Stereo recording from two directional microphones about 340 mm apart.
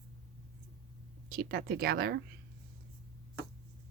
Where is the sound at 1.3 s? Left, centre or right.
Right.